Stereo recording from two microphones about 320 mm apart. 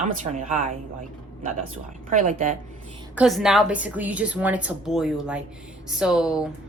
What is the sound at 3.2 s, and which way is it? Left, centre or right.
A woman's voice, centre.